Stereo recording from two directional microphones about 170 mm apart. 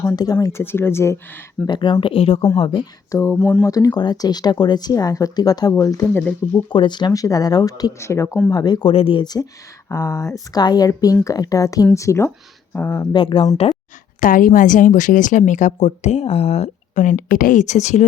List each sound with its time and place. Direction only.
0.0 s speech: 20° left (ahead or behind)
1.7 s speech: 30° left (ahead or behind)
3.1 s speech: 15° left (ahead or behind)
13.1 s speech: 30° left (ahead or behind)
14.2 s speech: 50° left (ahead or behind)